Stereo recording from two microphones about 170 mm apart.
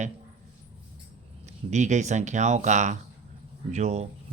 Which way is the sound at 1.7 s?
45° right (ahead or behind).